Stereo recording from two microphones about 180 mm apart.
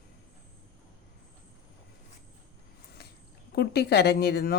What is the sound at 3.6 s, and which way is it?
Speech, 65° left (ahead or behind).